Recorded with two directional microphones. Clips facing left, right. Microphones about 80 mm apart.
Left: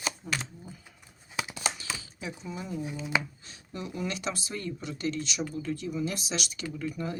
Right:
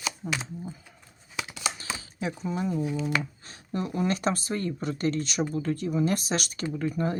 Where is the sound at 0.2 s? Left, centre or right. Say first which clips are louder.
Right 4 dB; right.